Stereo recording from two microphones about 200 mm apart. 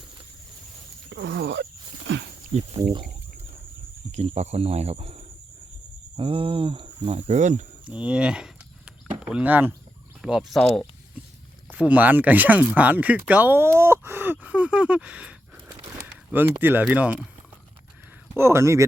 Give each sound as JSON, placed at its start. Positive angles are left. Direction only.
{"t": 1.1, "sound": "speech", "side_deg": -60}
{"t": 2.1, "sound": "wild animals", "side_deg": -70}
{"t": 4.1, "sound": "speech", "side_deg": -35}
{"t": 7.9, "sound": "speech", "side_deg": -5}
{"t": 11.7, "sound": "speech", "side_deg": -10}
{"t": 18.3, "sound": "speech", "side_deg": -15}